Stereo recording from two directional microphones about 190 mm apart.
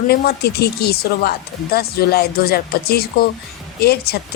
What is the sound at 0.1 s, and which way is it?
Speech, 55° left (ahead or behind).